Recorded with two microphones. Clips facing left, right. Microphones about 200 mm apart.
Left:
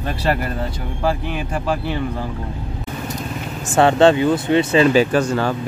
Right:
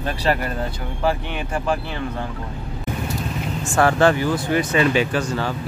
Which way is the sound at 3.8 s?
25° left (ahead or behind).